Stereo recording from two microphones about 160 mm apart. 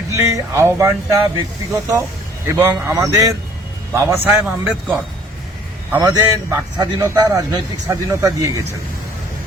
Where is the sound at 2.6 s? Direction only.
15° right (ahead or behind).